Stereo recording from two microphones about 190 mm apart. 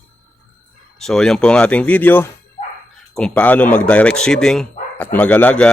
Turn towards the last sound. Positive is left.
turn(degrees=5)  # may be behind; listen again after turning